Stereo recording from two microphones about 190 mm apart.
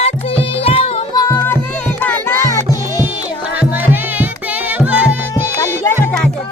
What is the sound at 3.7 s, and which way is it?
Music, 10° right (ahead or behind).